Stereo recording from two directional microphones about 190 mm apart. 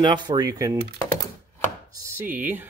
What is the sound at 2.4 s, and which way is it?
Speech, 10° right (ahead or behind).